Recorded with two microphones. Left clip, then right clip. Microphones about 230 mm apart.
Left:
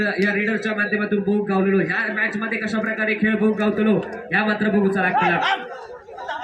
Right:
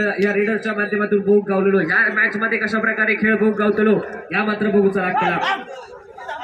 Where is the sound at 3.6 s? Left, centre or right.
Left.